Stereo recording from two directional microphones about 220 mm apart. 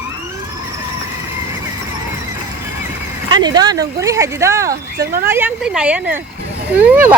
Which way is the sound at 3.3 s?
20° right (ahead or behind).